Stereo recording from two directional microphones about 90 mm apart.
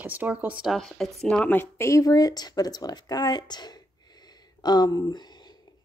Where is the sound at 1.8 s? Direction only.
35° left (ahead or behind).